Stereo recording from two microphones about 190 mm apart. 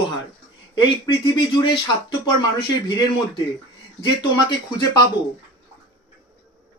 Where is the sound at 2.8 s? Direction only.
20° left (ahead or behind).